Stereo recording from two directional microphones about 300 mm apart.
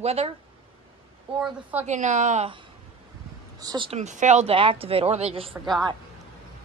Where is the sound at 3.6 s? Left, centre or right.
Centre.